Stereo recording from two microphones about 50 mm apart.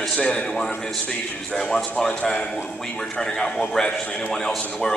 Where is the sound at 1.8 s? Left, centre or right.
Centre.